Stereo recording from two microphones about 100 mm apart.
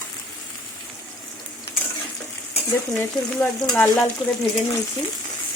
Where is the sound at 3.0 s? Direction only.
20° left (ahead or behind).